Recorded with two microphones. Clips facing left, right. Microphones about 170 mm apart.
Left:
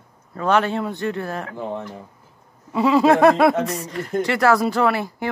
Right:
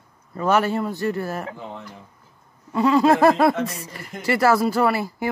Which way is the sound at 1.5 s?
50° left (ahead or behind).